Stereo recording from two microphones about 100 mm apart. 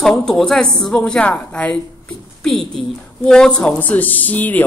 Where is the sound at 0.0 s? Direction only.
5° left (ahead or behind).